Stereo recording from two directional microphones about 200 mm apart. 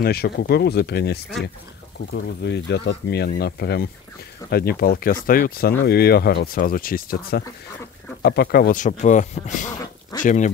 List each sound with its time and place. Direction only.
0.0 s speech: 50° left (ahead or behind)